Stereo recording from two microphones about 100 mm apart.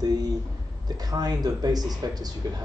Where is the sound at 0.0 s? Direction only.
40° right (ahead or behind).